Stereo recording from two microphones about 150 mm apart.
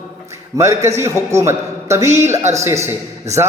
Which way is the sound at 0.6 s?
20° right (ahead or behind).